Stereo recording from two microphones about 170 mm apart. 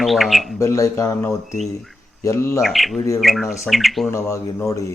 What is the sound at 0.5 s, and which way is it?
Speech, 20° left (ahead or behind).